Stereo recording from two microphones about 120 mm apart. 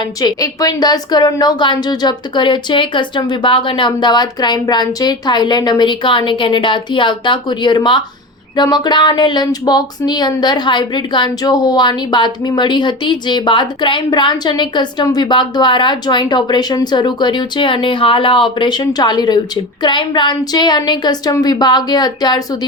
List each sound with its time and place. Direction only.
0.0 s speech: 35° left (ahead or behind)